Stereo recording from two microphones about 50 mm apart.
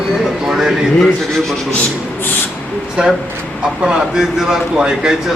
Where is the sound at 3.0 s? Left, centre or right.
Right.